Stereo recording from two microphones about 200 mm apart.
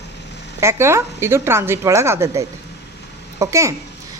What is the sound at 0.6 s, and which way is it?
Speech, 10° right (ahead or behind).